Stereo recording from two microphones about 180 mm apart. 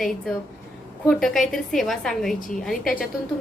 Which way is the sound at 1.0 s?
5° left (ahead or behind).